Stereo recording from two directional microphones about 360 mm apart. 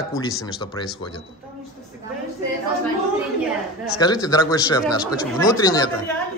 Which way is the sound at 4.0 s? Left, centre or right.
Centre.